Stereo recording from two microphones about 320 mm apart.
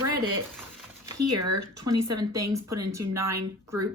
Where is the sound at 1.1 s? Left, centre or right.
Right.